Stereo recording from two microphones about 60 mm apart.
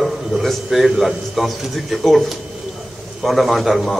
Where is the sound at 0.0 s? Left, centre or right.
Centre.